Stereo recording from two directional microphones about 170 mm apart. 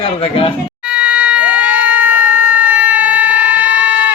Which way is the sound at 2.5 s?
10° right (ahead or behind).